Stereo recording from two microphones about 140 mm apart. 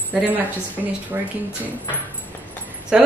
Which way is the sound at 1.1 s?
15° right (ahead or behind).